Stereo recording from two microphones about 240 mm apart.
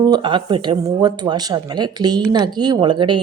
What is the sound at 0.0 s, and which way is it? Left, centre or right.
Speech, centre.